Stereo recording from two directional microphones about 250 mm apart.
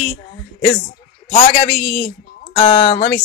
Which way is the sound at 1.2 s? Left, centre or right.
Left.